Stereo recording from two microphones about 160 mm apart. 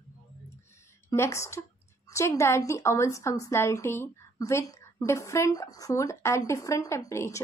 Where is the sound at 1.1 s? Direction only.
15° left (ahead or behind).